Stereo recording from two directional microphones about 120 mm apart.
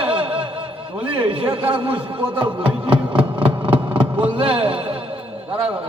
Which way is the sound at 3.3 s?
45° right (ahead or behind).